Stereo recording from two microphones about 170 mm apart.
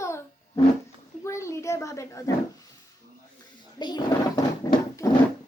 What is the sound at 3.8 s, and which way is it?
Speech, 25° left (ahead or behind).